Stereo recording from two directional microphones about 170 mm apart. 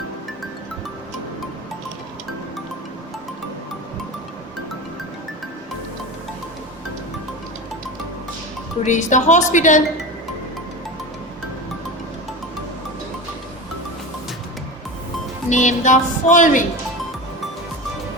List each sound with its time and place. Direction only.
8.8 s speech: 45° left (ahead or behind)
15.4 s speech: 45° left (ahead or behind)